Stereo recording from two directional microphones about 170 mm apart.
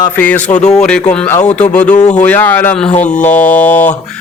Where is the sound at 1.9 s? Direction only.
40° left (ahead or behind).